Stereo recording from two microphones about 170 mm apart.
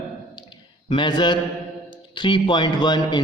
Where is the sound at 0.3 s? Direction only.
25° left (ahead or behind).